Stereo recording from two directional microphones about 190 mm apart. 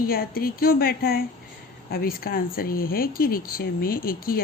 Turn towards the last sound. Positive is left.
turn(degrees=50)  # may be behind; listen again after turning